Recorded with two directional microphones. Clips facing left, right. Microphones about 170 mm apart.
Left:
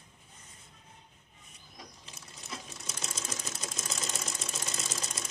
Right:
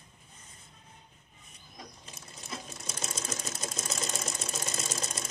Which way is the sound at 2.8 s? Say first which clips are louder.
Right 3 dB; 45° right (ahead or behind).